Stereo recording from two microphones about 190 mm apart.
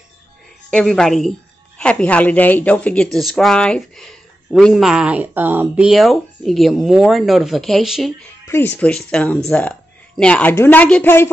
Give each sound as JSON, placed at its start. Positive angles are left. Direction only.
{"t": 0.7, "sound": "speech", "side_deg": 5}
{"t": 8.5, "sound": "speech", "side_deg": 10}